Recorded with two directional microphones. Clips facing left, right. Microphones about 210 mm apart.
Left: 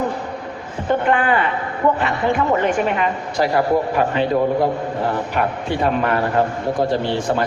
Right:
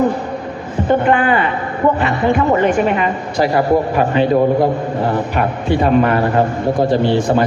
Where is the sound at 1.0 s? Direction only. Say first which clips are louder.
Right 4 dB; 5° right (ahead or behind).